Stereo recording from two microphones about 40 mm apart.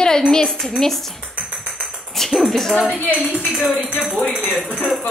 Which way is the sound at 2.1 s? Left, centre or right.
Centre.